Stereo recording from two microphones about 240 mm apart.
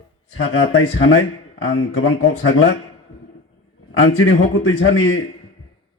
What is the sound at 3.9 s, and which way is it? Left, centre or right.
A man's voice, left.